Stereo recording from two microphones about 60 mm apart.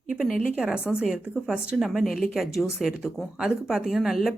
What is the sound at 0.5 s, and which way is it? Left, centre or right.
A woman's voice, centre.